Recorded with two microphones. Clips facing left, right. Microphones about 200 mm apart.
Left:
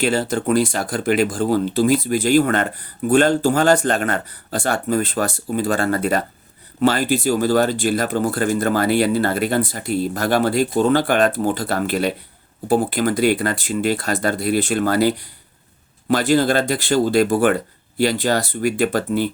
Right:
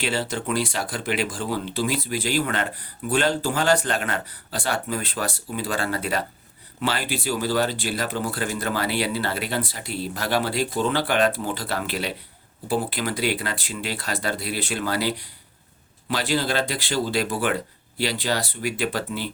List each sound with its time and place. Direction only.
0.0 s speech: 45° left (ahead or behind)